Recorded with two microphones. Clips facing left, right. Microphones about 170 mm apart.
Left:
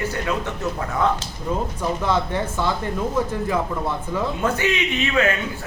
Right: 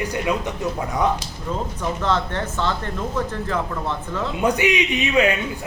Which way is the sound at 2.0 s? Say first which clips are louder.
Even; 10° left (ahead or behind).